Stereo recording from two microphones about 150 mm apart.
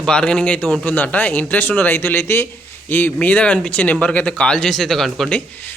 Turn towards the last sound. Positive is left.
turn(degrees=10)  # may be behind; listen again after turning